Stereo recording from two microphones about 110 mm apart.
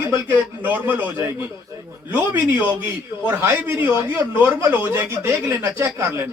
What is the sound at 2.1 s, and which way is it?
Speech, 15° right (ahead or behind).